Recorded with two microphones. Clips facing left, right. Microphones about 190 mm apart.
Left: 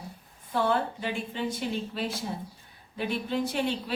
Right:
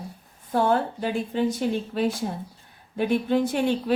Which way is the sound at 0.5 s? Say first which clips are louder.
Right 4 dB; 45° right (ahead or behind).